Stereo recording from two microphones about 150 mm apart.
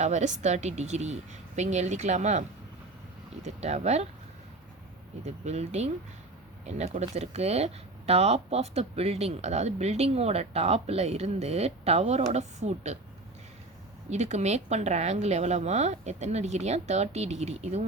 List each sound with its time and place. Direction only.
0.0 s speech: 50° right (ahead or behind)
3.4 s speech: 50° right (ahead or behind)
5.2 s speech: 45° right (ahead or behind)
14.1 s speech: 50° right (ahead or behind)